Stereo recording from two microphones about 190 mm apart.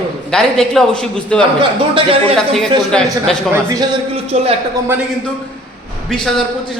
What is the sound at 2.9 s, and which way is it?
Speech, 5° left (ahead or behind).